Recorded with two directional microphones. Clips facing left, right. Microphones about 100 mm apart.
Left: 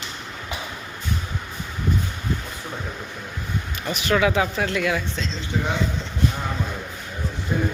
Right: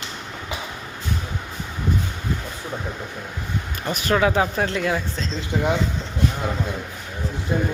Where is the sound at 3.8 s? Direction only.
40° right (ahead or behind).